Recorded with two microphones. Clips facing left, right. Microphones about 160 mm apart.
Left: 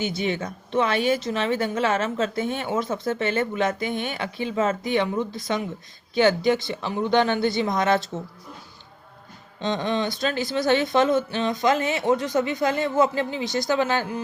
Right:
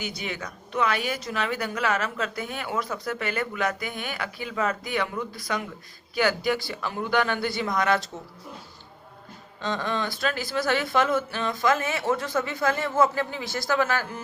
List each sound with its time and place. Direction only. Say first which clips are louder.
0.0 s speech: left 7 dB; 25° left (ahead or behind)
9.6 s speech: left 4 dB; 20° left (ahead or behind)